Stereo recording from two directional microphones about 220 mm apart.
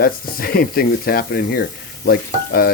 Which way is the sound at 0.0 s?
40° left (ahead or behind).